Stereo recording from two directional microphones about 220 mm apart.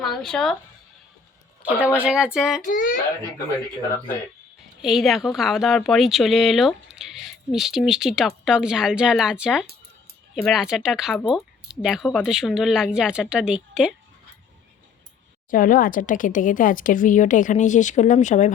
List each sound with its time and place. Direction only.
0.0 s speech: centre (ahead or behind)
1.6 s speech: 5° right (ahead or behind)
2.6 s speech: 40° left (ahead or behind)
4.8 s speech: centre (ahead or behind)
15.4 s speech: 40° left (ahead or behind)